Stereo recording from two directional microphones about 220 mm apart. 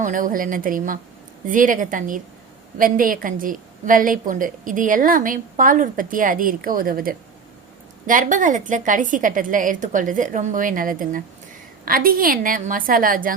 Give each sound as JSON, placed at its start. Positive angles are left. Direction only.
{"t": 0.0, "sound": "a woman's voice", "side_deg": -35}